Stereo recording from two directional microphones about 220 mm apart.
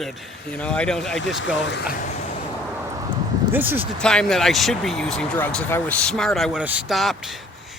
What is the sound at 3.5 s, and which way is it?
Speech, 10° right (ahead or behind).